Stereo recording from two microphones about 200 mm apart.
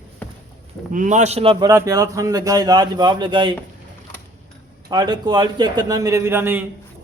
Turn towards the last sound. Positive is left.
turn(degrees=-10)  # may be behind; listen again after turning